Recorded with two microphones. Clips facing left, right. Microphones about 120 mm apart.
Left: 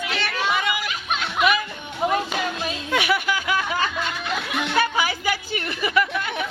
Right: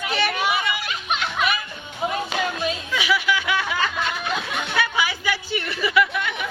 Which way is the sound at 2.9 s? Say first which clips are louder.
Left 2 dB; 55° left (ahead or behind).